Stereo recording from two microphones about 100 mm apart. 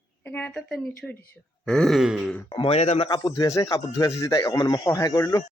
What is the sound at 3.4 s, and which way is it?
Speech, 35° left (ahead or behind).